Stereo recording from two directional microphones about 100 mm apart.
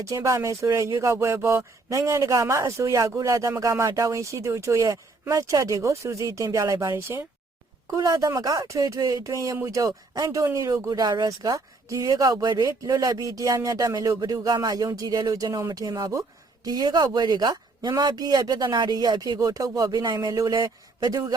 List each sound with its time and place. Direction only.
0.0 s speech: 30° right (ahead or behind)
7.9 s speech: 35° right (ahead or behind)